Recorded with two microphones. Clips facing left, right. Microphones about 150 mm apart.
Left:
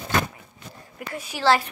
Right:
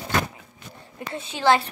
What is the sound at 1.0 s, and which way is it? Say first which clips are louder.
Speech: even; 25° right (ahead or behind).